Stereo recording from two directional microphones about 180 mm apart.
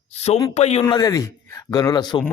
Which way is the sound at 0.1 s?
35° left (ahead or behind).